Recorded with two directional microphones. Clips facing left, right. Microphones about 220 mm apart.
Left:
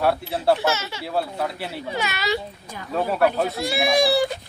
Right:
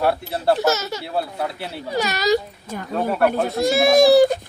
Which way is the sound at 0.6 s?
40° right (ahead or behind).